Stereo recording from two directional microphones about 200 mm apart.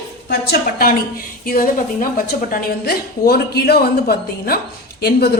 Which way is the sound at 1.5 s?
45° left (ahead or behind).